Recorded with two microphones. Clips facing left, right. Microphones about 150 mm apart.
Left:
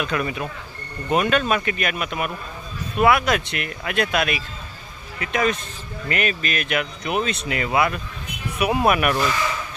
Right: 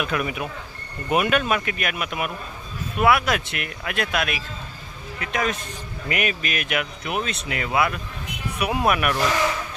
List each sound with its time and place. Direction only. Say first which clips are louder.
0.0 s speech: left 1 dB; 5° right (ahead or behind)
6.1 s speech: left 1 dB; 10° right (ahead or behind)